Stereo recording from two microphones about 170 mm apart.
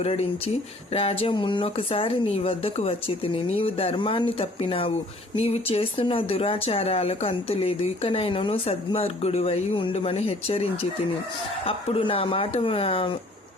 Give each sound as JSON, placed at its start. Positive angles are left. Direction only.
{"t": 0.0, "sound": "speech", "side_deg": 35}